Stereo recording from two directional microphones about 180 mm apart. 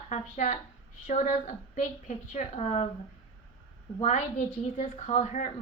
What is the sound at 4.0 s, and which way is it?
A woman's voice, 40° left (ahead or behind).